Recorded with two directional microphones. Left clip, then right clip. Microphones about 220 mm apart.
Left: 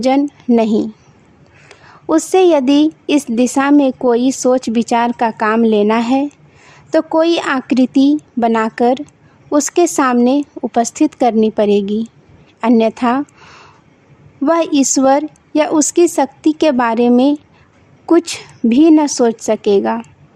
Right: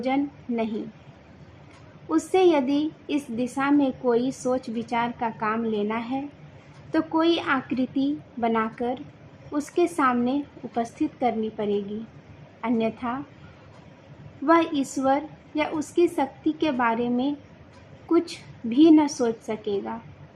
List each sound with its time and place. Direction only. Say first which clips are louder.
0.0 s a woman's voice: left 12 dB; 55° left (ahead or behind)
2.0 s a woman's voice: left 10 dB; 55° left (ahead or behind)
14.4 s a woman's voice: left 8 dB; 55° left (ahead or behind)